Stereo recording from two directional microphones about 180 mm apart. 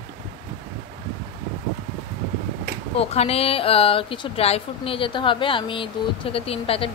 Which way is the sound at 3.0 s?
35° left (ahead or behind).